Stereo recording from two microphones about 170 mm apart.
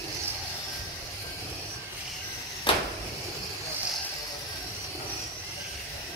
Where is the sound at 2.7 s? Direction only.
30° left (ahead or behind).